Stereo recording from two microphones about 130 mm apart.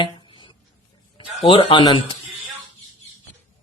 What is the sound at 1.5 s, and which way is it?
Speech, 40° left (ahead or behind).